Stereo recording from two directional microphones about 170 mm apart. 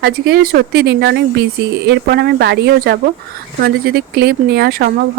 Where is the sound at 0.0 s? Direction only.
70° right (ahead or behind).